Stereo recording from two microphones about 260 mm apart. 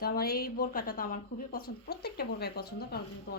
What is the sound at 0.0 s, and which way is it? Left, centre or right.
Speech, left.